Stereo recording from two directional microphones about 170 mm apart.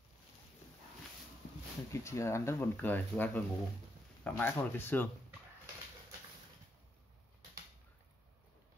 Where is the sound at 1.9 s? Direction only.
15° left (ahead or behind).